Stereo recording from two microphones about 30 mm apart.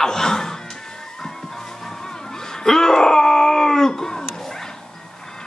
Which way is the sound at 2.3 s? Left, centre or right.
Centre.